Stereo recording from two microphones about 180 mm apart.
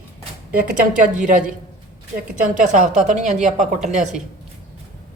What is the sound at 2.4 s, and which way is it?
A woman's voice, 40° right (ahead or behind).